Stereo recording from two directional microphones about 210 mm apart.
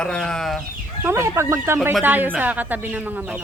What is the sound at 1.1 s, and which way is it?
Speech, 10° right (ahead or behind).